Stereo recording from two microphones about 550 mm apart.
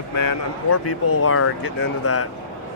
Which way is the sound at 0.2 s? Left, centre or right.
Left.